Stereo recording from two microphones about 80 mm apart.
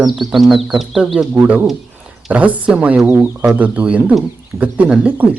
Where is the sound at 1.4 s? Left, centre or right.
Centre.